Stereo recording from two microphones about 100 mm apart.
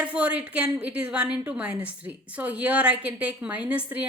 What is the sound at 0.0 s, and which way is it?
A woman's voice, 15° right (ahead or behind).